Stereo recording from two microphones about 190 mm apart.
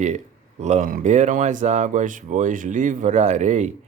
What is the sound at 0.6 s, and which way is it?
Speech, 40° right (ahead or behind).